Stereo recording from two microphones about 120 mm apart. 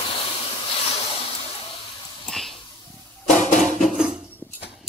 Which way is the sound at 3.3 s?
90° left.